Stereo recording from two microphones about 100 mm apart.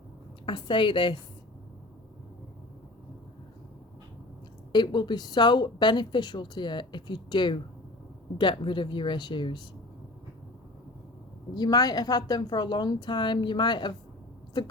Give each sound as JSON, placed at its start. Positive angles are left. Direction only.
{"t": 0.4, "sound": "a woman's voice", "side_deg": 55}
{"t": 4.7, "sound": "speech", "side_deg": 50}
{"t": 11.5, "sound": "speech", "side_deg": 45}